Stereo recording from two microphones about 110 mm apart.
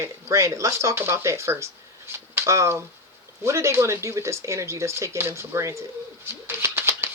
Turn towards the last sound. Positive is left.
turn(degrees=-20)  # may be behind; listen again after turning